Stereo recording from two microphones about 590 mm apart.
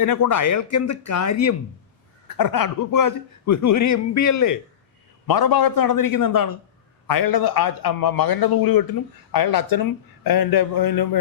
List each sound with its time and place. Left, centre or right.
0.0 s a man's voice: left